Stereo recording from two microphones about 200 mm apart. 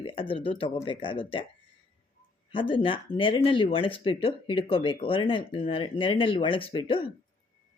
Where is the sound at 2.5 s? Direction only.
25° left (ahead or behind).